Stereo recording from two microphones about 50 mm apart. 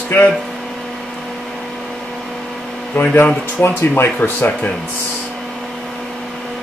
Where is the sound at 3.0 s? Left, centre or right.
Left.